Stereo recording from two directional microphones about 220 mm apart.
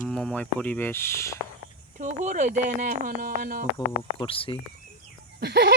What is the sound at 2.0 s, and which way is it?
Speech, 35° right (ahead or behind).